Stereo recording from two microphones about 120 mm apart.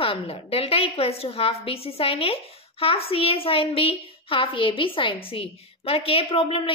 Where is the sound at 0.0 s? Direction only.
55° left (ahead or behind).